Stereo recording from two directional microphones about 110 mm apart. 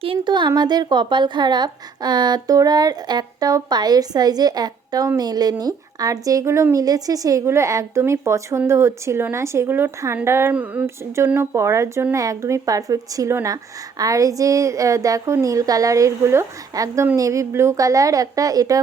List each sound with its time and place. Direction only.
0.0 s a woman's voice: 50° right (ahead or behind); by 10.5 s 25° right (ahead or behind)
10.5 s a sound: 15° right (ahead or behind)
10.8 s a woman's voice: 25° right (ahead or behind)